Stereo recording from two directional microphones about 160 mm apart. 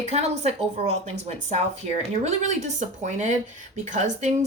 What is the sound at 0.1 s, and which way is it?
Speech, 40° right (ahead or behind).